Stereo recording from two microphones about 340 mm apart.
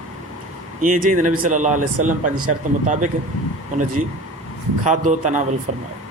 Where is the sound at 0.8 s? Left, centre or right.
Right.